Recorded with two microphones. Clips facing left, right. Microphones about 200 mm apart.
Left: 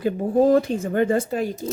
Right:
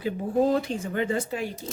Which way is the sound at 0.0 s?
45° left (ahead or behind).